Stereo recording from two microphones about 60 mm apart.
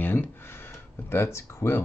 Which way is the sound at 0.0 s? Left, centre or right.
Left.